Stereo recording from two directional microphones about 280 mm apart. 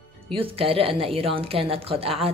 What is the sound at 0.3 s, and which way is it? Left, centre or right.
A woman's voice, centre.